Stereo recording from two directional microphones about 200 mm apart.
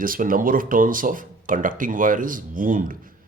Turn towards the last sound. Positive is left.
turn(degrees=-45)  # may be behind; listen again after turning